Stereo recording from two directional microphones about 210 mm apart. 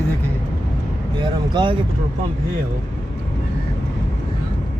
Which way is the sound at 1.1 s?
20° right (ahead or behind).